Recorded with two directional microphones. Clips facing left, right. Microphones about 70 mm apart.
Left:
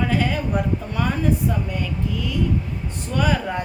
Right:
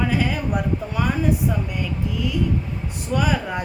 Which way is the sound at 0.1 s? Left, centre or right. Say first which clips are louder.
Left 1 dB; centre.